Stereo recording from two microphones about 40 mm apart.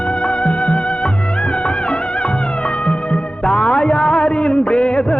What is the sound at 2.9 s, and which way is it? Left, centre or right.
Music, left.